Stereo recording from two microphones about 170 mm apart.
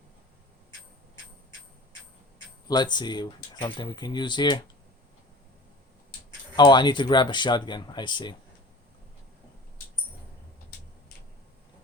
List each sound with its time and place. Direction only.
2.6 s speech: 25° left (ahead or behind)
6.6 s speech: 25° left (ahead or behind)